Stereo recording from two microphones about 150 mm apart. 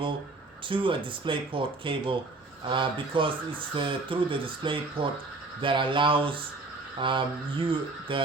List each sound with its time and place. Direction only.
0.7 s speech: 35° right (ahead or behind)